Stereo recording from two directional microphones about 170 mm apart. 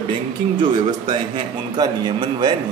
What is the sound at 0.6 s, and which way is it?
A man's voice, 25° right (ahead or behind).